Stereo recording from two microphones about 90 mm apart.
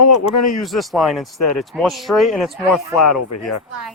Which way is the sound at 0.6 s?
Centre (ahead or behind).